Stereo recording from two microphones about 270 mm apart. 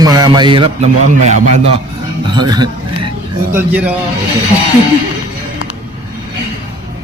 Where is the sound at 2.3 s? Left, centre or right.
Centre.